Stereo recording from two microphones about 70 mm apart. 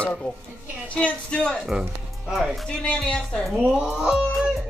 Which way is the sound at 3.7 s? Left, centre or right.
Centre.